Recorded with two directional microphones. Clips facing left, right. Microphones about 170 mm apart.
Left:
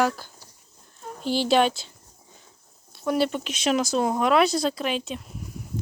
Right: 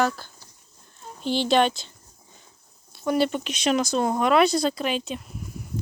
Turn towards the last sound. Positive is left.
turn(degrees=0)  # may be behind; listen again after turning